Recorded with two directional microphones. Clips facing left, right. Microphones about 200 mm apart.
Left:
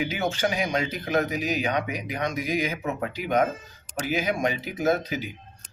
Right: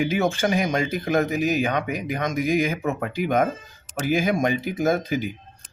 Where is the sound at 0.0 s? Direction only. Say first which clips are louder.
Right 4 dB; 50° right (ahead or behind).